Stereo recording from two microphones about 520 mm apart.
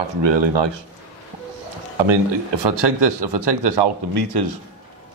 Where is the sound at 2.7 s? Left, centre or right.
Right.